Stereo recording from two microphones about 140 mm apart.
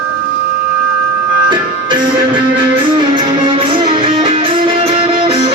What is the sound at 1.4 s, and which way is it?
Music, 35° right (ahead or behind).